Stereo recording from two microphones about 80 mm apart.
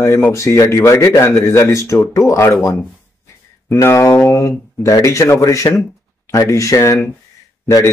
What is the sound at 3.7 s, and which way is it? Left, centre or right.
Speech, left.